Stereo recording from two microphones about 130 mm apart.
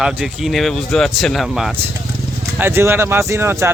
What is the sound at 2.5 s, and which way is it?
Speech, 15° right (ahead or behind).